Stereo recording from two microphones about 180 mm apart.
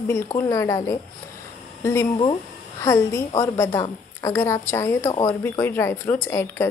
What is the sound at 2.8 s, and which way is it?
A woman's voice, 15° left (ahead or behind).